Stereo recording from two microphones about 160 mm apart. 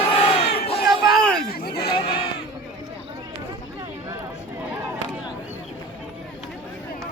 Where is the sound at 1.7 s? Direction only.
30° left (ahead or behind).